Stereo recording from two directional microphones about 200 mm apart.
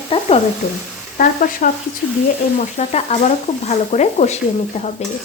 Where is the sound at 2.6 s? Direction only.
35° left (ahead or behind).